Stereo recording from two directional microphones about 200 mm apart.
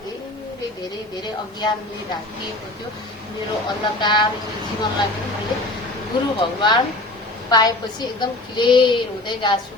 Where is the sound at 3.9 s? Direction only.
20° left (ahead or behind).